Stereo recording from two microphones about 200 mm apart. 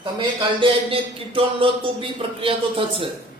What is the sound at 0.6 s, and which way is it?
Speech, 25° right (ahead or behind).